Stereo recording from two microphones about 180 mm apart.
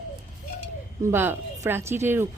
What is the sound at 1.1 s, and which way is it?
A woman's voice, 10° right (ahead or behind).